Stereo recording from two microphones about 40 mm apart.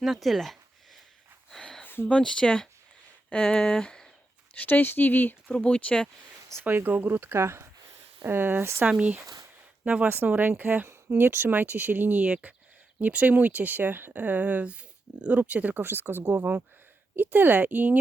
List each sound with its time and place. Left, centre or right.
0.0 s speech: centre
2.0 s speech: left
4.5 s speech: left
5.5 s speech: left
6.6 s speech: right
7.2 s speech: right
8.2 s speech: right
8.9 s speech: right
10.2 s a woman's voice: right
11.2 s speech: right
11.5 s a woman's voice: right
12.2 s speech: right
15.8 s speech: right
17.2 s a woman's voice: right